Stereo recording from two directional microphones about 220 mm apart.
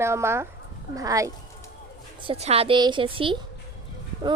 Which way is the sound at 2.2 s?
30° right (ahead or behind).